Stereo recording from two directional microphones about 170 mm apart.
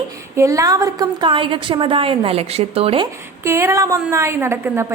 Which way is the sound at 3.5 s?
15° right (ahead or behind).